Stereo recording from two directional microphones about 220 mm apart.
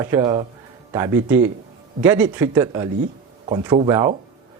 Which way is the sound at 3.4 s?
25° right (ahead or behind).